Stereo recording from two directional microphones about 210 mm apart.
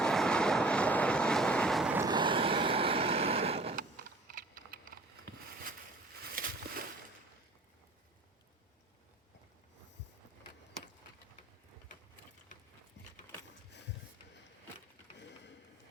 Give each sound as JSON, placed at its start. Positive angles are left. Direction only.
{"t": 0.0, "sound": "vehicle", "side_deg": 5}
{"t": 2.0, "sound": "vehicle", "side_deg": -20}
{"t": 3.8, "sound": "typing", "side_deg": -40}
{"t": 6.3, "sound": "a sound", "side_deg": -45}